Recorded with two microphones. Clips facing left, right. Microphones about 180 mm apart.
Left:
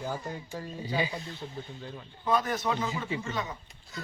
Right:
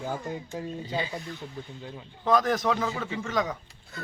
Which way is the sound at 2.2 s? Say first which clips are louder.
Right 5 dB; 90° right.